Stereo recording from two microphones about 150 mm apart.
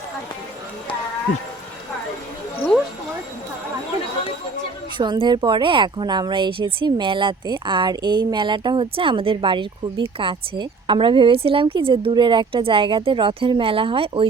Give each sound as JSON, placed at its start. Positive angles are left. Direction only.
{"t": 4.9, "sound": "speech", "side_deg": -35}